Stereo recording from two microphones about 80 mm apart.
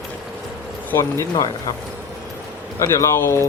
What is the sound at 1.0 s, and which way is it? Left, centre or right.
Speech, left.